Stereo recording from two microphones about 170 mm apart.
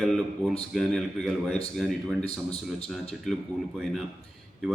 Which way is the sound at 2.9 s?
Centre (ahead or behind).